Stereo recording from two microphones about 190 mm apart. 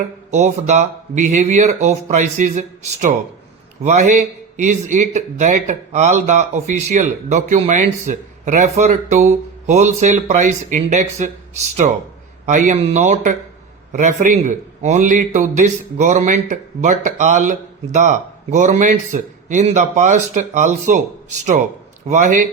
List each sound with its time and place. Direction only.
0.3 s a man's voice: 40° right (ahead or behind)